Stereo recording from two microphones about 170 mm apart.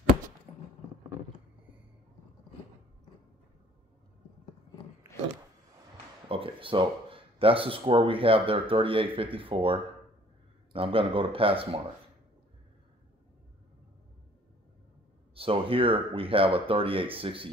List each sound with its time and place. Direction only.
6.2 s speech: 30° right (ahead or behind)
15.3 s speech: 35° right (ahead or behind)